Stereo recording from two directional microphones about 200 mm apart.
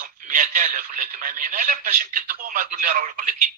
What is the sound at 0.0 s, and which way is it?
Speech, 45° right (ahead or behind).